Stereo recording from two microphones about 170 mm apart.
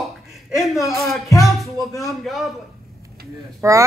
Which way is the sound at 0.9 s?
Centre (ahead or behind).